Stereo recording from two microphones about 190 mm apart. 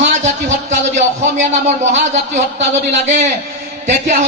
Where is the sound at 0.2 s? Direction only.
40° right (ahead or behind).